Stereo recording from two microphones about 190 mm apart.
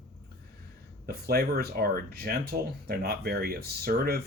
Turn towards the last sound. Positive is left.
turn(degrees=-55)  # may be behind; listen again after turning